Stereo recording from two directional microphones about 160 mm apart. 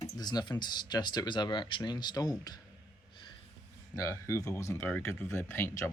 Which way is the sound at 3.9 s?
20° left (ahead or behind).